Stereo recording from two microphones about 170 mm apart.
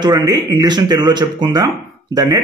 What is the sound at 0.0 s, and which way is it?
Speech, 25° right (ahead or behind).